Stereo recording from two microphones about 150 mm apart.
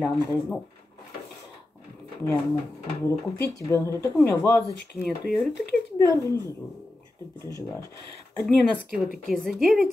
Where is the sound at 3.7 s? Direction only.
20° left (ahead or behind).